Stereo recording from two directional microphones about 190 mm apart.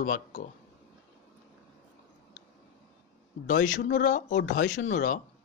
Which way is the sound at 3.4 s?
40° left (ahead or behind).